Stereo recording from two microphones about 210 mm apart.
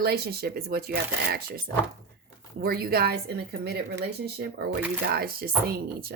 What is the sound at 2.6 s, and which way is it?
Speech, 45° right (ahead or behind).